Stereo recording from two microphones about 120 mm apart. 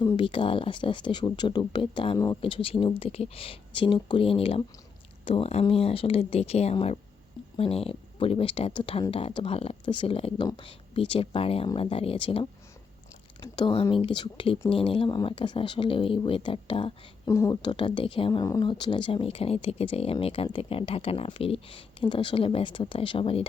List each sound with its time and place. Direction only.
0.2 s speech: 45° left (ahead or behind)
2.1 s speech: 30° left (ahead or behind)
2.4 s speech: 50° left (ahead or behind)
17.2 s speech: 25° left (ahead or behind); by 18.3 s 50° left (ahead or behind)
18.3 s speech: 30° left (ahead or behind); by 23.5 s 50° left (ahead or behind)